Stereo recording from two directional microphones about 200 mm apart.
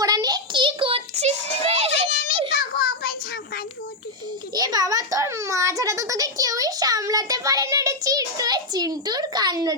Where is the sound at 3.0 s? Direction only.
50° left (ahead or behind).